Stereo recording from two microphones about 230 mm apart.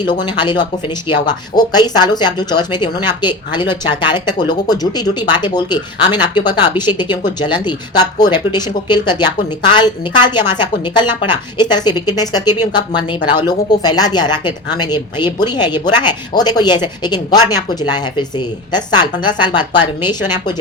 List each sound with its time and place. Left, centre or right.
0.0 s a woman's voice: centre